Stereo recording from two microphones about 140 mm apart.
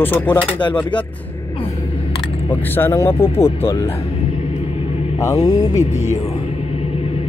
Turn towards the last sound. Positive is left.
turn(degrees=55)  # may be behind; listen again after turning